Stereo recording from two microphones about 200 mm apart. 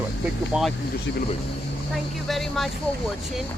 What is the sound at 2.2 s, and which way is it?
Speech, centre (ahead or behind).